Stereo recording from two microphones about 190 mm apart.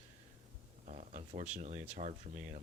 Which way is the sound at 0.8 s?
40° right (ahead or behind).